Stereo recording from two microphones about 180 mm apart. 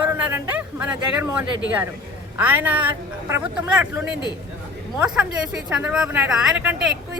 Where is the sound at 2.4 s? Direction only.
10° right (ahead or behind).